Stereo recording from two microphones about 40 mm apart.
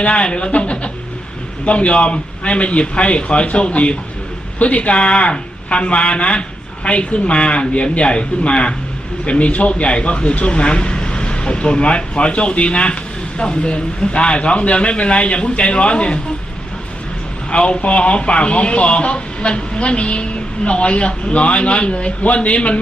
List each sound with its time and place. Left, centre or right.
0.0 s speech: left
17.5 s speech: left